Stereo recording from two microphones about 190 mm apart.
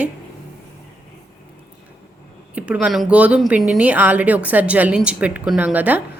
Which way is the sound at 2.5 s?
5° right (ahead or behind).